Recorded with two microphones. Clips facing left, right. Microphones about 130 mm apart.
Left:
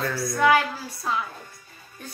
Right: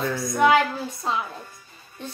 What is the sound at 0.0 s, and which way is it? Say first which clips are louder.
Speech: right 2 dB; 20° right (ahead or behind).